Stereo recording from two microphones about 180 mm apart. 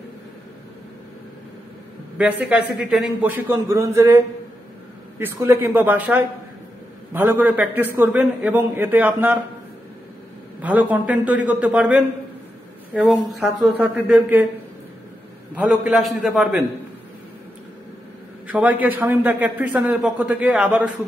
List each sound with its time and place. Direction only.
2.1 s a man's voice: 5° right (ahead or behind)
5.2 s a man's voice: 15° right (ahead or behind)
10.6 s a man's voice: 10° right (ahead or behind)
15.5 s a man's voice: 5° right (ahead or behind)
18.5 s a man's voice: 10° right (ahead or behind)